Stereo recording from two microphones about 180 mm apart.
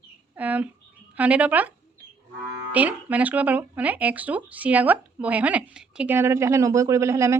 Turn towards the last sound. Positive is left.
turn(degrees=-15)  # may be behind; listen again after turning